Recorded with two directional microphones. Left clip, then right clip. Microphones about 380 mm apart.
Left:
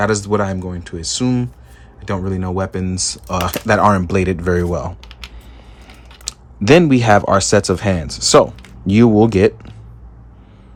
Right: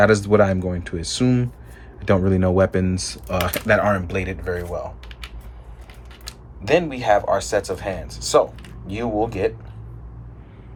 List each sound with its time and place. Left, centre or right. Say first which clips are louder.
0.0 s speech: right 2 dB; centre
6.2 s speech: left 11 dB; centre